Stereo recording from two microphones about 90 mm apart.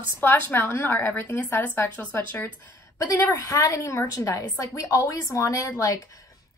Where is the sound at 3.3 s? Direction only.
35° left (ahead or behind).